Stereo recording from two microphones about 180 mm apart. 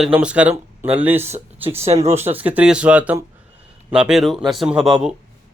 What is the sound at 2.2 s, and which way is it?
Speech, 10° right (ahead or behind).